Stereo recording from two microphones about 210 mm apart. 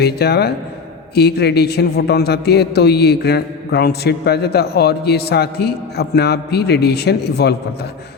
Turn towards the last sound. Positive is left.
turn(degrees=50)  # may be behind; listen again after turning